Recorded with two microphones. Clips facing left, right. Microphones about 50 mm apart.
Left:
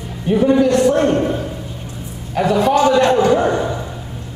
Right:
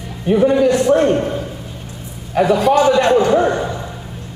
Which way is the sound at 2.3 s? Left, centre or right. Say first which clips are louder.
Right 2 dB; centre.